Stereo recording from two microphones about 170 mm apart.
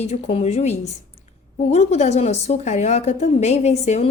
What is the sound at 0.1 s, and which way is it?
A woman's voice, 40° left (ahead or behind).